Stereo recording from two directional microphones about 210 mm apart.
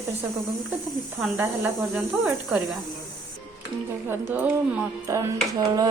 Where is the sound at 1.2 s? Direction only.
10° right (ahead or behind).